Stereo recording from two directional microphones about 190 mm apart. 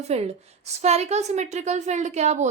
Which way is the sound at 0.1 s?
35° right (ahead or behind).